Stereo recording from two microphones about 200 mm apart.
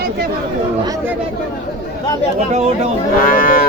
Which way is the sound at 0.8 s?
15° right (ahead or behind).